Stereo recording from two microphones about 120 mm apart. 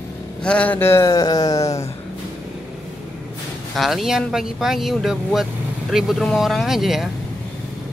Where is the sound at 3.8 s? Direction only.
Centre (ahead or behind).